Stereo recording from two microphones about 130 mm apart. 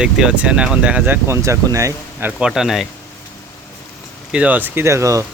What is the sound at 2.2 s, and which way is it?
Speech, 5° right (ahead or behind).